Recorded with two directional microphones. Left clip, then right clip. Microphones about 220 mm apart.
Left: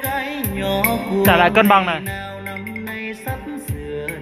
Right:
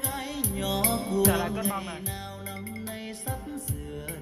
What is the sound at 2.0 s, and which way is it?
Music, centre (ahead or behind).